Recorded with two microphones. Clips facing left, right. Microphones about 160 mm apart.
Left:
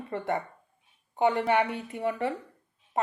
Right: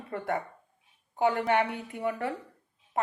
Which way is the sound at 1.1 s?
5° right (ahead or behind).